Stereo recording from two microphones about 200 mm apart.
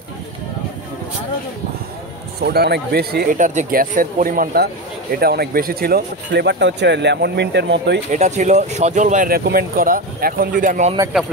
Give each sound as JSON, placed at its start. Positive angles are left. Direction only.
{"t": 2.4, "sound": "speech", "side_deg": -50}
{"t": 8.1, "sound": "speech", "side_deg": -35}